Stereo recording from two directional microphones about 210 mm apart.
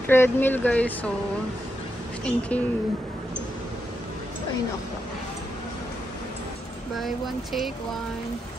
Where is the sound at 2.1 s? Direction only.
5° left (ahead or behind).